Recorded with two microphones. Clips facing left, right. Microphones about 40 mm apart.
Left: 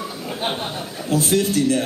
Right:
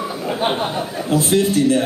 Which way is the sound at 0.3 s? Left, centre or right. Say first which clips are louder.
Right 6 dB; right.